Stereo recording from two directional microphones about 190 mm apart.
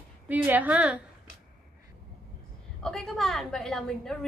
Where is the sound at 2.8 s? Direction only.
Centre (ahead or behind).